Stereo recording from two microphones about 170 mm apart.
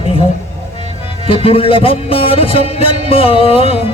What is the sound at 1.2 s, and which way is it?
Music, 35° left (ahead or behind).